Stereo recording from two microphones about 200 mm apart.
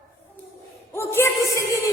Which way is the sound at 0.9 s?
10° left (ahead or behind).